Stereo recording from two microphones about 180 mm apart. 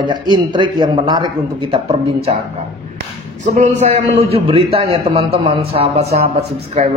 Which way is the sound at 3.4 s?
40° right (ahead or behind).